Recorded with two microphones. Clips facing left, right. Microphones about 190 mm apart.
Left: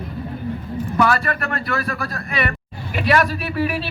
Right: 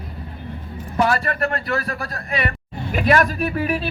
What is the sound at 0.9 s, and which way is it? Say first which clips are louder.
Speech: even; 35° right (ahead or behind).